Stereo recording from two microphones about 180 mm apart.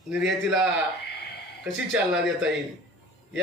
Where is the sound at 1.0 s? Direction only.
65° left (ahead or behind).